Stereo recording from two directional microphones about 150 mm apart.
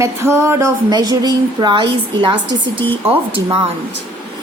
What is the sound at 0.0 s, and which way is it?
A woman's voice, 20° right (ahead or behind).